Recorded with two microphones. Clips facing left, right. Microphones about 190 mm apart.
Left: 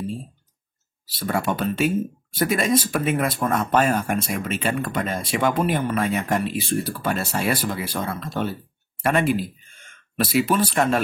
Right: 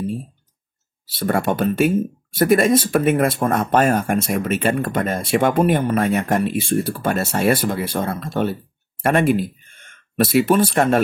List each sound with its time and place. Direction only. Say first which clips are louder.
1.2 s speech: right 5 dB; 50° right (ahead or behind)